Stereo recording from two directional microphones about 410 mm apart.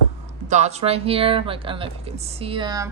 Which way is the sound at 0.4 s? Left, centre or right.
Centre.